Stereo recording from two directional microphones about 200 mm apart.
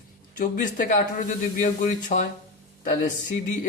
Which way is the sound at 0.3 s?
40° left (ahead or behind).